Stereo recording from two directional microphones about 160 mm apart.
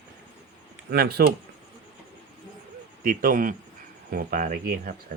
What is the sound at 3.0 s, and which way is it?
Speech, 60° right (ahead or behind).